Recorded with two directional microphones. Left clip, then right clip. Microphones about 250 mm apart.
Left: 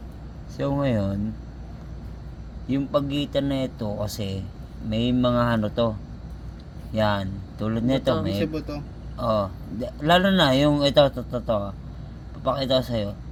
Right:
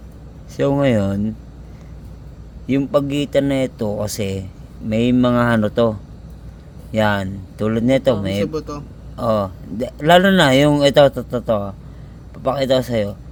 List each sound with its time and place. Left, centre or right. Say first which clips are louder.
0.5 s a man's voice: right 9 dB; right
2.6 s a man's voice: right 7 dB; right
6.9 s a man's voice: right 6 dB; right